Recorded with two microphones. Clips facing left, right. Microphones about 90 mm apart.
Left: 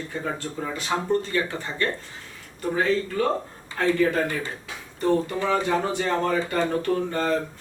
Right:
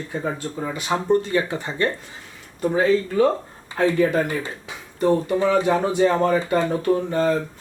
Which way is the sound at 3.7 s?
20° right (ahead or behind).